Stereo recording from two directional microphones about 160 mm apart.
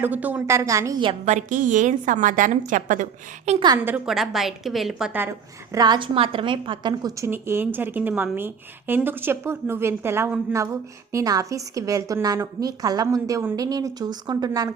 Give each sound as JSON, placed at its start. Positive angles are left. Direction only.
{"t": 0.0, "sound": "a woman's voice", "side_deg": -10}
{"t": 1.0, "sound": "a woman's voice", "side_deg": -45}
{"t": 3.8, "sound": "a woman's voice", "side_deg": -5}
{"t": 5.7, "sound": "a woman's voice", "side_deg": -25}
{"t": 7.3, "sound": "a woman's voice", "side_deg": -15}